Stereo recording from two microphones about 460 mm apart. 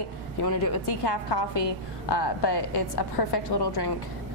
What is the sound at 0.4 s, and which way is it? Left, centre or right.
A woman's voice, left.